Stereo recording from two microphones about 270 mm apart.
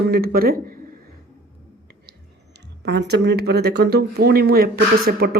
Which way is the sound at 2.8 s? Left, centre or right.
Right.